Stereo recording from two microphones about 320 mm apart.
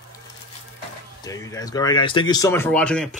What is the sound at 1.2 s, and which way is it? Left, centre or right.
Speech, centre.